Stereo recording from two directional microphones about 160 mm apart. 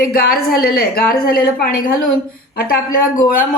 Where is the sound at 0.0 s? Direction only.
70° left (ahead or behind).